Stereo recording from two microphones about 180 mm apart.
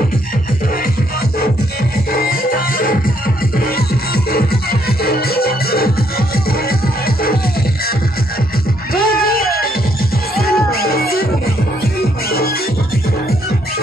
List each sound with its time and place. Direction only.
2.1 s music: 55° left (ahead or behind)
8.9 s music: 55° left (ahead or behind)